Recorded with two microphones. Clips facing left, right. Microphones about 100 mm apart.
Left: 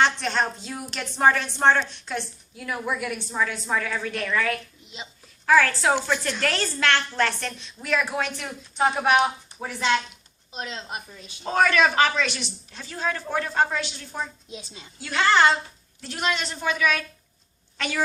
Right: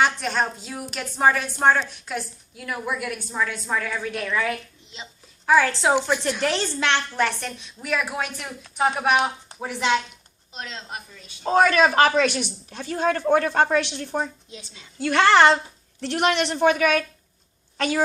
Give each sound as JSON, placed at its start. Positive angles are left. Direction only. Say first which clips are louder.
{"t": 0.0, "sound": "a woman's voice", "louder": "even", "side_deg": -5}
{"t": 9.6, "sound": "a woman's voice", "louder": "right 2 dB", "side_deg": -15}
{"t": 10.5, "sound": "a woman's voice", "louder": "left 2 dB", "side_deg": 5}
{"t": 11.4, "sound": "a woman's voice", "louder": "right 3 dB", "side_deg": -30}
{"t": 17.7, "sound": "a woman's voice", "louder": "right 5 dB", "side_deg": -40}